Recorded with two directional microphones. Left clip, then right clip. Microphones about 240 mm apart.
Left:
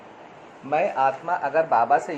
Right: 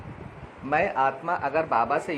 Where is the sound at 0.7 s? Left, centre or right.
Right.